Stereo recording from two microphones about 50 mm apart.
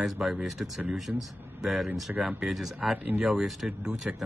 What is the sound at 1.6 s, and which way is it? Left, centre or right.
Speech, centre.